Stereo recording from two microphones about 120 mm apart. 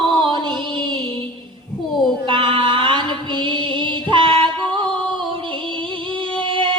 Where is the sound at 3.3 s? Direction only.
45° right (ahead or behind).